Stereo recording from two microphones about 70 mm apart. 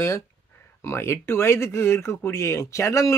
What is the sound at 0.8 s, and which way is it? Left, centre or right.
Speech, left.